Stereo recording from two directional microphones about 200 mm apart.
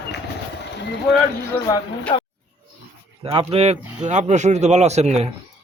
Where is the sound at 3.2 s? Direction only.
30° right (ahead or behind).